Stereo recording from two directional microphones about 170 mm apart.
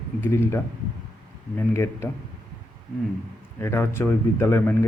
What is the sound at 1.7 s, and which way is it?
Speech, 15° left (ahead or behind).